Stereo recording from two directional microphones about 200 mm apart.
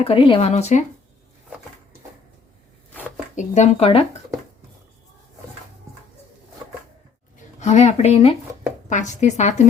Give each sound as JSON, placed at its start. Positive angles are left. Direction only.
{"t": 0.0, "sound": "speech", "side_deg": 25}
{"t": 3.3, "sound": "speech", "side_deg": 35}
{"t": 7.6, "sound": "speech", "side_deg": 35}